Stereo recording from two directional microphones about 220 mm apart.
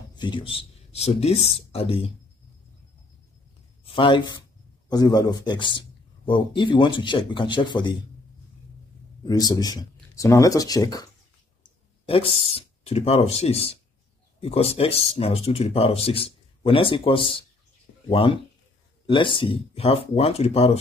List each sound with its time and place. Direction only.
0.1 s speech: 20° left (ahead or behind)
3.8 s speech: 25° left (ahead or behind)
9.2 s speech: 15° left (ahead or behind)